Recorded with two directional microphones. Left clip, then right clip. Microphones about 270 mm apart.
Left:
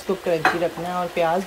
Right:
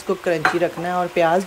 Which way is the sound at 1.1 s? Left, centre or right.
Right.